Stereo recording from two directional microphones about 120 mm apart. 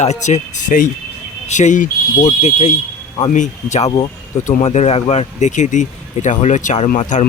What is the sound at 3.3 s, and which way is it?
Speech, 85° left.